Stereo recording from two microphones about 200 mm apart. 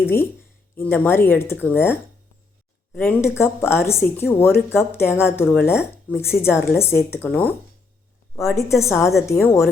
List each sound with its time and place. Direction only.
0.0 s speech: 10° left (ahead or behind)
3.2 s speech: 15° left (ahead or behind)
8.5 s speech: 15° left (ahead or behind)